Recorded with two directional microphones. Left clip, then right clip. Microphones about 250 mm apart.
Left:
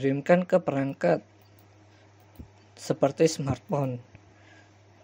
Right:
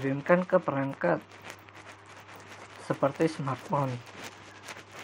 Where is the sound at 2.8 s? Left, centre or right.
Left.